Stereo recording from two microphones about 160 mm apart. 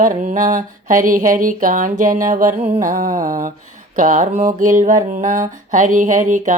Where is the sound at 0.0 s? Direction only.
50° right (ahead or behind).